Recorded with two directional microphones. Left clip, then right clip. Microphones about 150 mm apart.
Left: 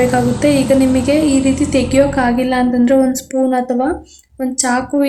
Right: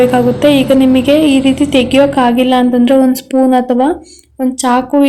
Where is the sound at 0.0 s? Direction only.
30° right (ahead or behind).